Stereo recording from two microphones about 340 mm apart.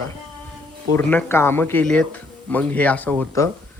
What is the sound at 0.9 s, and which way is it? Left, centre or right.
Speech, centre.